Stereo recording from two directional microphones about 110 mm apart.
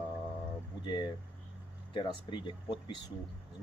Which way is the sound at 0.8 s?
40° left (ahead or behind).